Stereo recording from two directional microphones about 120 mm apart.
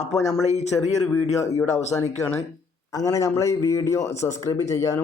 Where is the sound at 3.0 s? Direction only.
30° left (ahead or behind).